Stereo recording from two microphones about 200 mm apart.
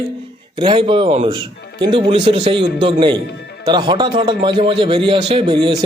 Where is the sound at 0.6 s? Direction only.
25° right (ahead or behind).